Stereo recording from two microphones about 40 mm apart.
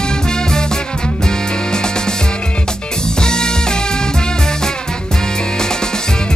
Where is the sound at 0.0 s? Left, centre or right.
Centre.